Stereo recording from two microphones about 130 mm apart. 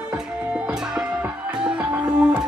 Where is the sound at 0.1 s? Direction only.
10° right (ahead or behind).